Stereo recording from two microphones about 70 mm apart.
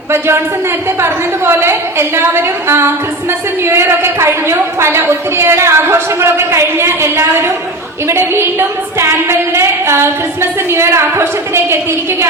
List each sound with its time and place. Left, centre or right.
1.0 s a woman's voice: right